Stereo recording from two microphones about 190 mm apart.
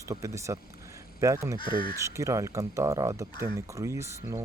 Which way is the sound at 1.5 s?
25° left (ahead or behind).